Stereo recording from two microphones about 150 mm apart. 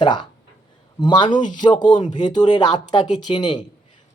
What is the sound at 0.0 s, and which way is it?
Speech, 30° left (ahead or behind).